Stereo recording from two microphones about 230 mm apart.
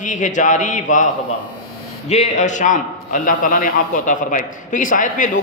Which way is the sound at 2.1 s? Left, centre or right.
Left.